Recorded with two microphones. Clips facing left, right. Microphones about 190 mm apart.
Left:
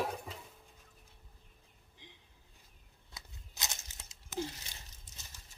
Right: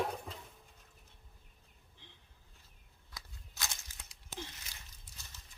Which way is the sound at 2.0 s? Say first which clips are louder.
Left 5 dB; 15° left (ahead or behind).